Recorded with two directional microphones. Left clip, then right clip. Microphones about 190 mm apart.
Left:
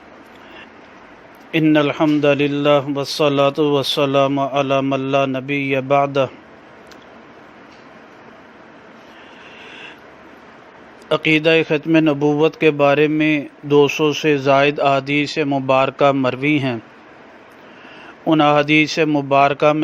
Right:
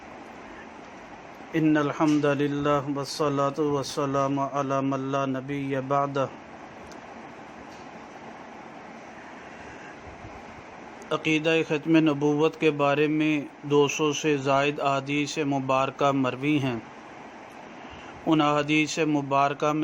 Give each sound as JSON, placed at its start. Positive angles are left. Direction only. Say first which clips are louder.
{"t": 1.5, "sound": "a man's voice", "louder": "left 8 dB", "side_deg": 35}
{"t": 11.1, "sound": "speech", "louder": "left 10 dB", "side_deg": 30}
{"t": 18.3, "sound": "a man's voice", "louder": "left 9 dB", "side_deg": 30}